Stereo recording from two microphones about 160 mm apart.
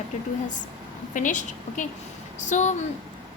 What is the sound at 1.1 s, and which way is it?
A woman's voice, 50° left (ahead or behind).